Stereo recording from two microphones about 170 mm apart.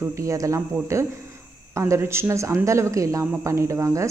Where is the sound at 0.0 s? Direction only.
15° right (ahead or behind).